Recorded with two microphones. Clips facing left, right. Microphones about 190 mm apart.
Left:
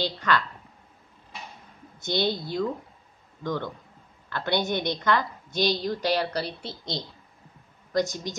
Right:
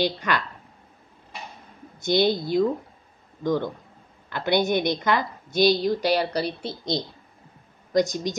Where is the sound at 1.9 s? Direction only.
10° right (ahead or behind).